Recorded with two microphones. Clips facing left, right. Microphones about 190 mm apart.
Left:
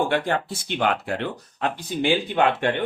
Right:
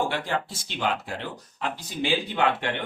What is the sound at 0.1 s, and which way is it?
Speech, 60° left (ahead or behind).